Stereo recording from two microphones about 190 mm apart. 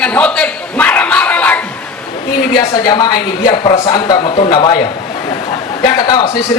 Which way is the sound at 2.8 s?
20° left (ahead or behind).